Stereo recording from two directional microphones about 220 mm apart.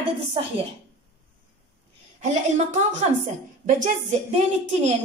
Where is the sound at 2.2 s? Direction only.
35° right (ahead or behind).